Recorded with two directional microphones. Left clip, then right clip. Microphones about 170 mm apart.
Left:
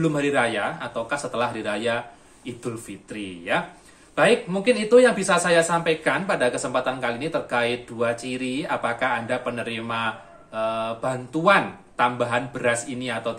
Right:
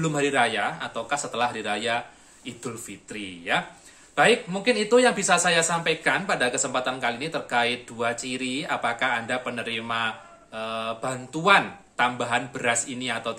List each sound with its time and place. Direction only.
0.0 s speech: 20° right (ahead or behind)